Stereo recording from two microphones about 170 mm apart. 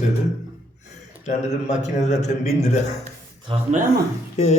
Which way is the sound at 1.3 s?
45° left (ahead or behind).